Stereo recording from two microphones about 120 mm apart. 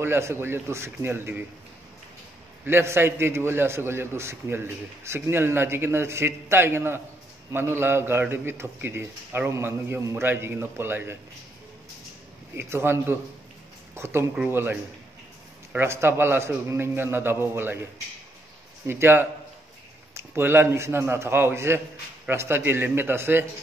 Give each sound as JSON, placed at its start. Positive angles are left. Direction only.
{"t": 0.0, "sound": "a man's voice", "side_deg": -20}
{"t": 2.6, "sound": "a man's voice", "side_deg": -20}
{"t": 12.5, "sound": "a man's voice", "side_deg": -20}
{"t": 18.9, "sound": "a man's voice", "side_deg": -20}